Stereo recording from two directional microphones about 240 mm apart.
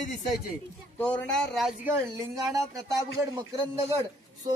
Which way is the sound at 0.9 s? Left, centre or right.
Centre.